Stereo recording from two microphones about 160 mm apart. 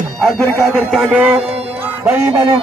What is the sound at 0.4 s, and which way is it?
Speech, 5° left (ahead or behind).